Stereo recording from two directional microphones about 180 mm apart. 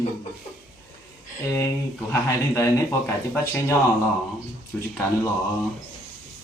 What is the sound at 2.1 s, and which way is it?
Speech, 15° left (ahead or behind).